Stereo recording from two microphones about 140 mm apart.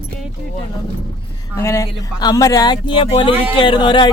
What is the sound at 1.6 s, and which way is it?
Speech, 20° left (ahead or behind).